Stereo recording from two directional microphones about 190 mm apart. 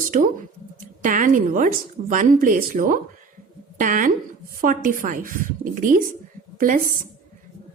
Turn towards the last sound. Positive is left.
turn(degrees=-45)  # may be behind; listen again after turning